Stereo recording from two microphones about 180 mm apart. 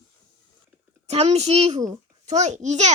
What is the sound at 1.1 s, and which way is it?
A child's voice, 35° right (ahead or behind).